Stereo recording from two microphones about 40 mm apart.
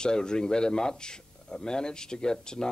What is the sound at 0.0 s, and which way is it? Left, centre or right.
A man's voice, centre.